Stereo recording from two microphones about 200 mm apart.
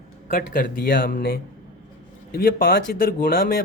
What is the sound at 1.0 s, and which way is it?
Speech, 45° left (ahead or behind).